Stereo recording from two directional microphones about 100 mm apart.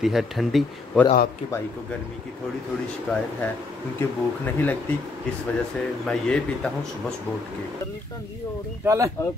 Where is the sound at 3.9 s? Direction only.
20° left (ahead or behind).